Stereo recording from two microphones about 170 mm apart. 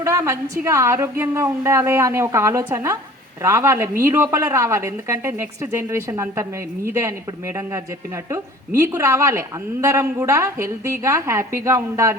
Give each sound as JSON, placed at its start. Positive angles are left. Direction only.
{"t": 0.0, "sound": "a woman's voice", "side_deg": -20}